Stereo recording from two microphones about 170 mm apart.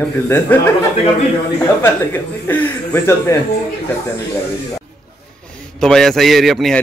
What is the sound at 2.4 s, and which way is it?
Speech, 10° left (ahead or behind).